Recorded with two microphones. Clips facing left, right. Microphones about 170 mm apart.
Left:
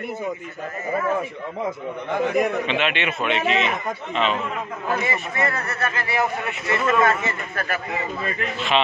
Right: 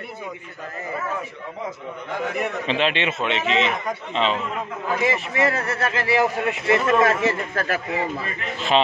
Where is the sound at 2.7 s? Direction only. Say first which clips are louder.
Right 1 dB; 30° right (ahead or behind).